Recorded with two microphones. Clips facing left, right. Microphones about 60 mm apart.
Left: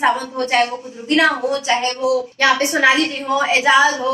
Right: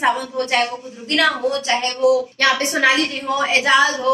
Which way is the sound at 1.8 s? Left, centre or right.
Centre.